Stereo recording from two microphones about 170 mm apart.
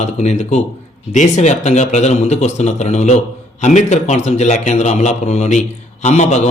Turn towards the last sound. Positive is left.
turn(degrees=45)  # may be behind; listen again after turning